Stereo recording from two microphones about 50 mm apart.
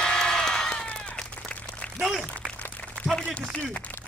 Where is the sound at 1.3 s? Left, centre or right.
Left.